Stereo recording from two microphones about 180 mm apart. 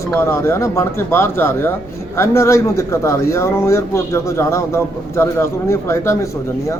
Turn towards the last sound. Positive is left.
turn(degrees=15)  # may be behind; listen again after turning